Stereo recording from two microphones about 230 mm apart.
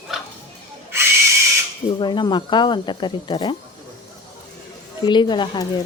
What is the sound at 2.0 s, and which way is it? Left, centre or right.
Speech, centre.